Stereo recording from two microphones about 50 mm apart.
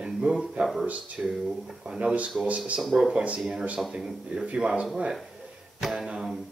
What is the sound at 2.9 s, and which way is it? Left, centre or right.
Speech, centre.